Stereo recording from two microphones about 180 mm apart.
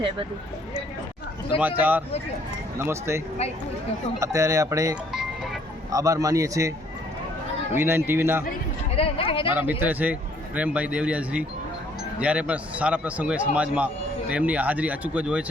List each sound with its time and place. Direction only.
1.6 s a man's voice: 10° right (ahead or behind)
4.2 s a man's voice: 15° right (ahead or behind)
9.0 s speech: 30° left (ahead or behind)
9.6 s a man's voice: 10° right (ahead or behind)